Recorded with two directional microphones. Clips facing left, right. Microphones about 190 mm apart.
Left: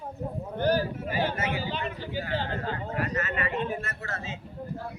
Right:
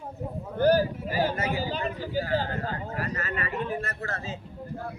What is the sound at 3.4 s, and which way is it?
Speech, 25° left (ahead or behind).